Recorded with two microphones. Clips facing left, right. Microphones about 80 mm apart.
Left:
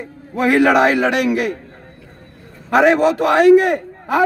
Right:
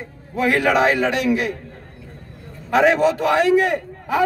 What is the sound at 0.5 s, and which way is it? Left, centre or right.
A man's voice, left.